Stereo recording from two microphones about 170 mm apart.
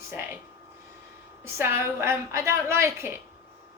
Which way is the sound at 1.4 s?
15° right (ahead or behind).